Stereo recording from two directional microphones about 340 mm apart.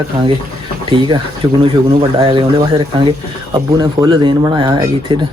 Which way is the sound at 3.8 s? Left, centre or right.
Centre.